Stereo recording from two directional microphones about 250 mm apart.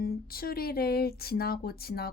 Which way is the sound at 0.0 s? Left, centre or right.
Left.